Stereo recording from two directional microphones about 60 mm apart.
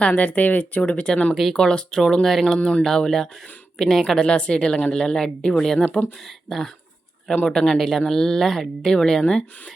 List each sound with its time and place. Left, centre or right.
0.0 s speech: left; by 2.6 s centre
2.6 s speech: left
2.8 s speech: centre
4.0 s speech: centre
6.5 s speech: centre